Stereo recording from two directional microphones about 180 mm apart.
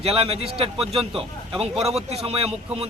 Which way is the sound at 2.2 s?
30° right (ahead or behind).